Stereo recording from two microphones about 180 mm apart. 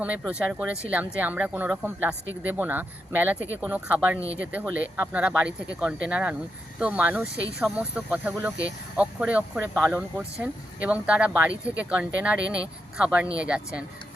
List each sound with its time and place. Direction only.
0.0 s speech: 5° right (ahead or behind)